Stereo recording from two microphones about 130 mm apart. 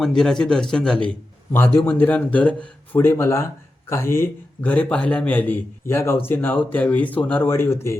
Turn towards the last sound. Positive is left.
turn(degrees=20)  # may be behind; listen again after turning